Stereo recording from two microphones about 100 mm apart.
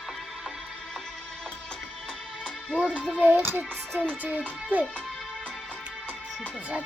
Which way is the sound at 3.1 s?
15° right (ahead or behind).